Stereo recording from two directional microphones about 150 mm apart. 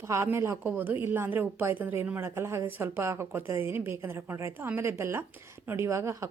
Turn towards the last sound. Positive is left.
turn(degrees=-20)  # may be behind; listen again after turning